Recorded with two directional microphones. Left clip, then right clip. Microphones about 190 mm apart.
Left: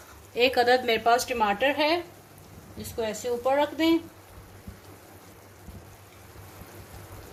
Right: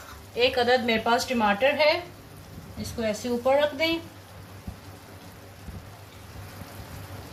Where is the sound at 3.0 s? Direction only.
60° left (ahead or behind).